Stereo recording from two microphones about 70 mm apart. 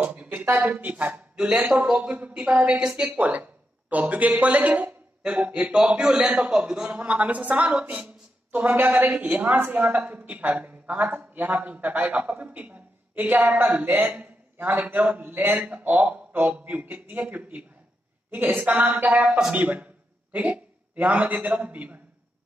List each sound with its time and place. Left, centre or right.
0.0 s a sound: centre
0.5 s speech: right
0.7 s a woman's voice: right; by 3.2 s centre
3.2 s a woman's voice: right